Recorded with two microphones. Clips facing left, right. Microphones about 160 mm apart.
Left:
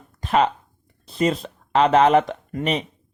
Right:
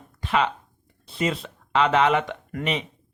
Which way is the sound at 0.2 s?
45° left (ahead or behind).